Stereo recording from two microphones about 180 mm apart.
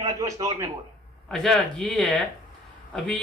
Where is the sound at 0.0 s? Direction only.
20° right (ahead or behind).